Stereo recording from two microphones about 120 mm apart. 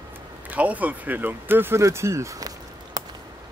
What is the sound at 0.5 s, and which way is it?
Speech, 10° right (ahead or behind).